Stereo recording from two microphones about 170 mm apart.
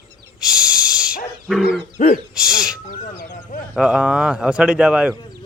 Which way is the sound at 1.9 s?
45° left (ahead or behind).